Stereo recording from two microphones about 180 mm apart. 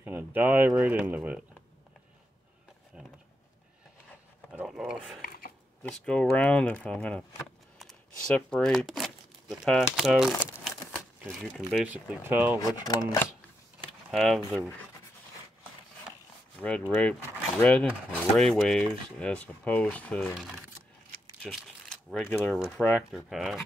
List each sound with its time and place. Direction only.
0.0 s speech: 10° right (ahead or behind)
4.5 s dog: 5° right (ahead or behind)
5.8 s speech: 5° left (ahead or behind); by 12.5 s 10° right (ahead or behind)
12.5 s speech: 20° left (ahead or behind)
14.1 s speech: centre (ahead or behind)
16.9 s speech: 10° left (ahead or behind)